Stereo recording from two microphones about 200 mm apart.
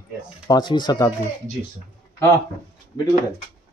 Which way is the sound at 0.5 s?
20° left (ahead or behind).